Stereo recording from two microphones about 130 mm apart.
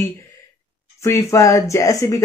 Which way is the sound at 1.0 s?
20° left (ahead or behind).